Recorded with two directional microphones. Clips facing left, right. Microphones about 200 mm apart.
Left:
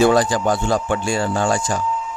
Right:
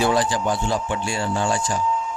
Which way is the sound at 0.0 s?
45° left (ahead or behind).